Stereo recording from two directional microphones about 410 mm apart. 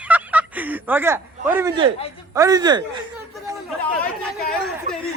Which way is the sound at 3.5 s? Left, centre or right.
Centre.